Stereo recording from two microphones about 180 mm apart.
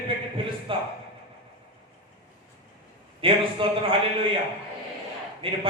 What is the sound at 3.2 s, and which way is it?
A man's voice, 30° right (ahead or behind).